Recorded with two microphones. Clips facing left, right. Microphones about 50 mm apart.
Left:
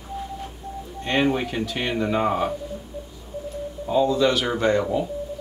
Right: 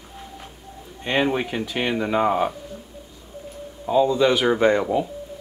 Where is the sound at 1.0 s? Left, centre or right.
Centre.